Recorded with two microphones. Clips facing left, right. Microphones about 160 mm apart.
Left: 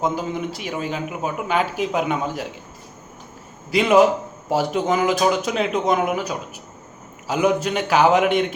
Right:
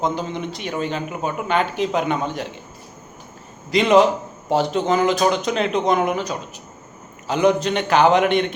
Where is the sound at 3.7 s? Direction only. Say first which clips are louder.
Even; 5° left (ahead or behind).